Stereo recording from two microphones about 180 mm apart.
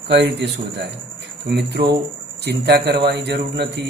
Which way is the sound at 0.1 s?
75° right (ahead or behind).